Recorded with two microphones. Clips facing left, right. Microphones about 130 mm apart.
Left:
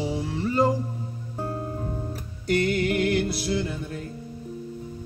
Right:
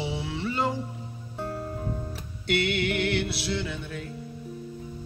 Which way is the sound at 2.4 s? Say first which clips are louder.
Left 3 dB; 40° left (ahead or behind).